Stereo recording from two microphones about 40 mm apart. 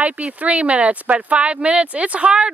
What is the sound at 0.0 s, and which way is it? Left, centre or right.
Speech, right.